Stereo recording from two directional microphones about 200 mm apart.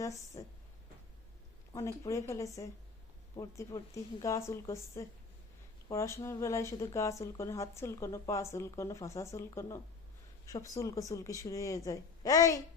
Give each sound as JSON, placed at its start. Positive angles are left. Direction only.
{"t": 0.0, "sound": "speech", "side_deg": 15}
{"t": 2.0, "sound": "speech", "side_deg": 15}